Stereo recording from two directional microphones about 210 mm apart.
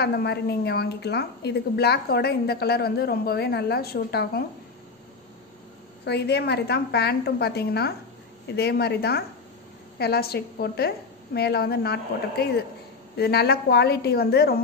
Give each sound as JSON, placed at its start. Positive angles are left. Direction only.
{"t": 0.0, "sound": "a woman's voice", "side_deg": 50}
{"t": 6.0, "sound": "a woman's voice", "side_deg": 50}